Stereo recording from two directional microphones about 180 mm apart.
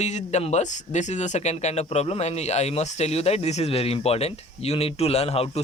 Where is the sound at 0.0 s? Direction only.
40° left (ahead or behind).